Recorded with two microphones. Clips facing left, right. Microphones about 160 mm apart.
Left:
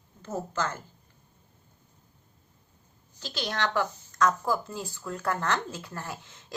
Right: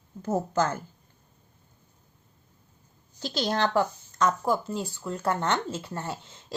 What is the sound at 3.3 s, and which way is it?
A woman's voice, 30° right (ahead or behind).